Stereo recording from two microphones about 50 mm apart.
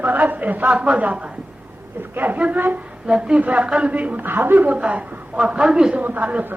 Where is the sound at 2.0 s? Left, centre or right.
Right.